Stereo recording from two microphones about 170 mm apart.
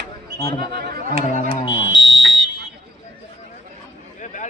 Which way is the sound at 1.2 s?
45° left (ahead or behind).